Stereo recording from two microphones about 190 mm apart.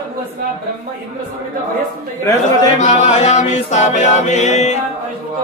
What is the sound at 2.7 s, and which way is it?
Music, 40° left (ahead or behind).